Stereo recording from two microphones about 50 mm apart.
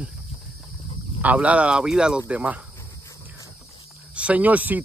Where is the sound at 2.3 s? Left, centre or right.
Right.